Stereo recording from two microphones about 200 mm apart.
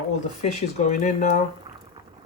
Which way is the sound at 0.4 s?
35° left (ahead or behind).